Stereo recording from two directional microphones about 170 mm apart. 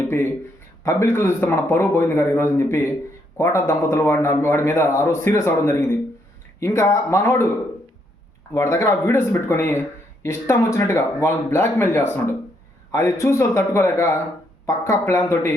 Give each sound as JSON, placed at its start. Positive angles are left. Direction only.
{"t": 0.9, "sound": "a man's voice", "side_deg": 15}
{"t": 8.5, "sound": "a man's voice", "side_deg": 20}